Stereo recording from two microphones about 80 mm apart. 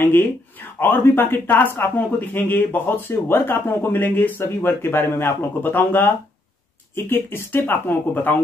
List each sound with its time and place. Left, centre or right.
0.0 s speech: left